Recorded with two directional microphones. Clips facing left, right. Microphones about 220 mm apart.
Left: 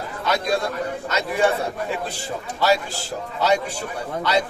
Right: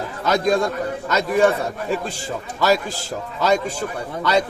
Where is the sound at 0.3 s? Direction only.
45° right (ahead or behind).